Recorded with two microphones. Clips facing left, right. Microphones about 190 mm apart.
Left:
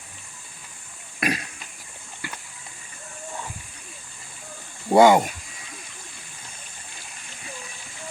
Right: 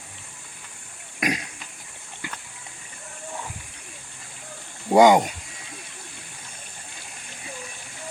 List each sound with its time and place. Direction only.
1.2 s burping: 15° right (ahead or behind)
2.2 s a sound: 20° right (ahead or behind)
4.9 s speech: 15° right (ahead or behind)